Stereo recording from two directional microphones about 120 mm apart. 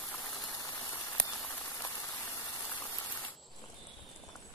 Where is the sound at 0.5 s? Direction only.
25° left (ahead or behind).